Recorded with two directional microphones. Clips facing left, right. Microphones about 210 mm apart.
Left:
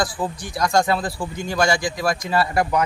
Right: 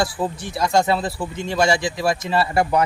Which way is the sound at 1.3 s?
25° right (ahead or behind).